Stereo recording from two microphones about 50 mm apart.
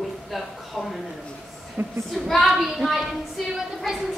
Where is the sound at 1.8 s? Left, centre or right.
Right.